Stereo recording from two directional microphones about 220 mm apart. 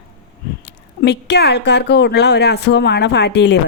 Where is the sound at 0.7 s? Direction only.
50° left (ahead or behind).